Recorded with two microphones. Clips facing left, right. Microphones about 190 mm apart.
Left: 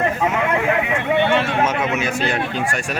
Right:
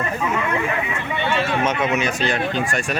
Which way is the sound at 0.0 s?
75° left (ahead or behind).